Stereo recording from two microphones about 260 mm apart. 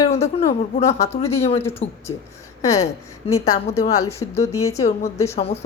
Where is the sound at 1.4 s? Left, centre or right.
Left.